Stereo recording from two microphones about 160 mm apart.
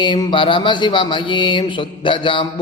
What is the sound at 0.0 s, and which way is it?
Mantra, 30° left (ahead or behind).